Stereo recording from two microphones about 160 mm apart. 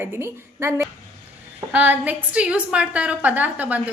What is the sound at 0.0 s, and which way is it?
A woman's voice, 15° right (ahead or behind).